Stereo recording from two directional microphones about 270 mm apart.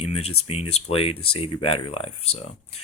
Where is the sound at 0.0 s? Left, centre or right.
Left.